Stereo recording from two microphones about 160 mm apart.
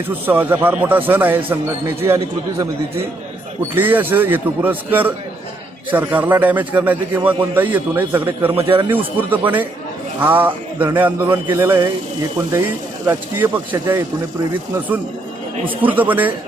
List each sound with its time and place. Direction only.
0.1 s a man's voice: 10° right (ahead or behind)
3.8 s a man's voice: 10° right (ahead or behind)
13.1 s a man's voice: 10° right (ahead or behind)
15.6 s a man's voice: 10° right (ahead or behind)